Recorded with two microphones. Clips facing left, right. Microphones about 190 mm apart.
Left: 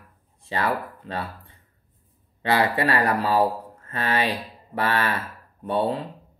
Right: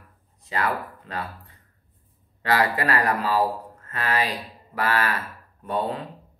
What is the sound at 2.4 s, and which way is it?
Speech, 25° left (ahead or behind).